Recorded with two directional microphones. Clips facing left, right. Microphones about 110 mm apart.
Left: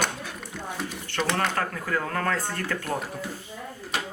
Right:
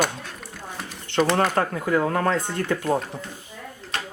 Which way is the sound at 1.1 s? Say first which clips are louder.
Right 6 dB; 20° right (ahead or behind).